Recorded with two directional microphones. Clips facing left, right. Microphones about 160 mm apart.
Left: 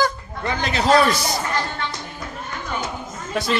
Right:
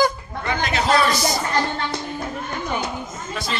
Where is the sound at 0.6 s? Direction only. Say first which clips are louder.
Left 2 dB; 35° left (ahead or behind).